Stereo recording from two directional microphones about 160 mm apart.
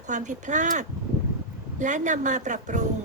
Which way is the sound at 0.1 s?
50° right (ahead or behind).